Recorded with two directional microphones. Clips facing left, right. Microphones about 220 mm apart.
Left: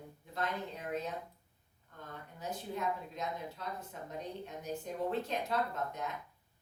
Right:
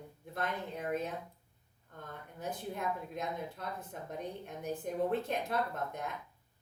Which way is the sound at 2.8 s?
55° right (ahead or behind).